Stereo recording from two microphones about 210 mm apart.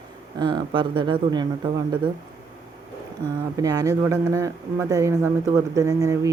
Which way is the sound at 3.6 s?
15° right (ahead or behind).